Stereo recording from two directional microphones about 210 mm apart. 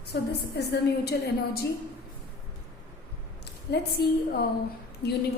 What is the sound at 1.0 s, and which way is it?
Speech, 50° left (ahead or behind).